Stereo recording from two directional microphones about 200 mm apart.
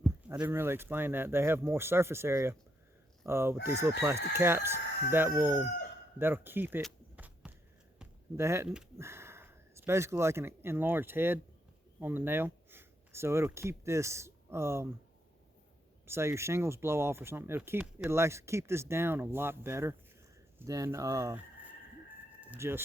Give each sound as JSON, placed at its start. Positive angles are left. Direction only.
{"t": 0.0, "sound": "speech", "side_deg": -5}
{"t": 6.8, "sound": "a sound", "side_deg": -5}
{"t": 8.4, "sound": "speech", "side_deg": -15}
{"t": 16.0, "sound": "speech", "side_deg": -15}
{"t": 22.4, "sound": "speech", "side_deg": -10}